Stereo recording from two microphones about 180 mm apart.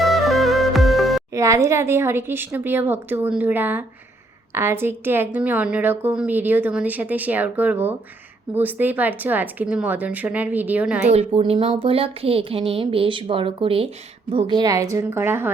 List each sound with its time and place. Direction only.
0.0 s music: centre (ahead or behind)
1.3 s a woman's voice: 15° right (ahead or behind)
11.1 s speech: 35° right (ahead or behind); by 15.4 s 15° right (ahead or behind)